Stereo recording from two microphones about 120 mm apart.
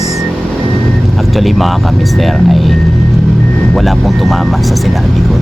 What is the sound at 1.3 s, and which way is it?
Speech, centre (ahead or behind).